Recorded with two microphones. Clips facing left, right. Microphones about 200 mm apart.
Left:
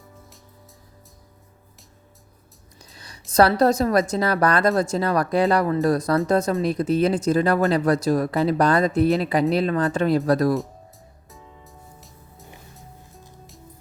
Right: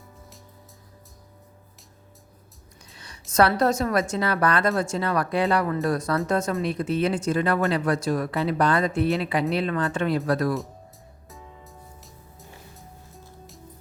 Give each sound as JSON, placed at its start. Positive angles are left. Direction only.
{"t": 2.8, "sound": "a woman's voice", "side_deg": 35}
{"t": 11.3, "sound": "music", "side_deg": 0}